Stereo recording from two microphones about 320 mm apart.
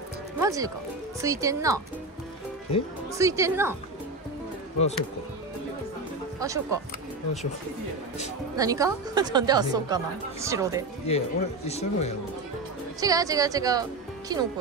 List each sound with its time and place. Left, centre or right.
0.4 s a woman's voice: centre
3.2 s a woman's voice: centre
6.4 s a woman's voice: centre
8.5 s a woman's voice: centre
11.1 s speech: centre
13.0 s a woman's voice: centre